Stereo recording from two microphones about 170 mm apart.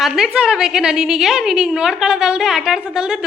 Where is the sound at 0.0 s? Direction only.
5° right (ahead or behind).